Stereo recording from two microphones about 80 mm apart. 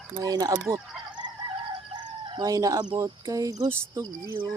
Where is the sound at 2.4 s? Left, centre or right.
Right.